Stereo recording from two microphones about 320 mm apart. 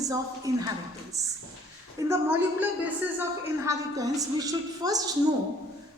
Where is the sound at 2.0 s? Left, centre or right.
Centre.